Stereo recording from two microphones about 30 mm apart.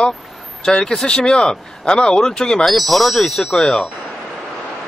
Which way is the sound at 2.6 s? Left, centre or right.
Centre.